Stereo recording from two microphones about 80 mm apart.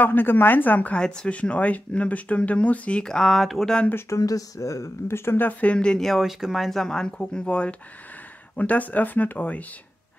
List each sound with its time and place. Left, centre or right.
0.0 s speech: left; by 3.8 s centre
4.2 s speech: left